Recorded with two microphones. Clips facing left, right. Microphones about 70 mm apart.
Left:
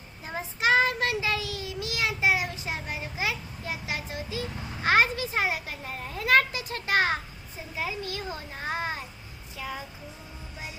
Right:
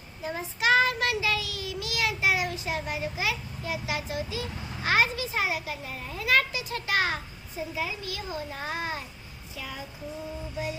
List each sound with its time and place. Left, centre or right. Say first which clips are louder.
0.3 s child singing: even; left
2.9 s a child's voice: right 1 dB; left